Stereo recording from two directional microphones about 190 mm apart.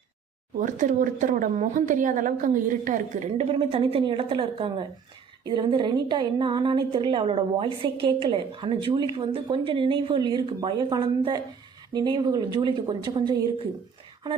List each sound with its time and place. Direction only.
0.6 s a woman's voice: 40° right (ahead or behind); by 13.7 s 25° right (ahead or behind)